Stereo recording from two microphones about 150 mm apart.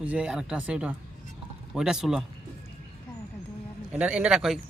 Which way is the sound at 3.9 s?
10° right (ahead or behind).